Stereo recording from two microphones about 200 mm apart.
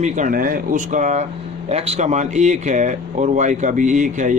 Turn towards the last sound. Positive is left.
turn(degrees=-40)  # may be behind; listen again after turning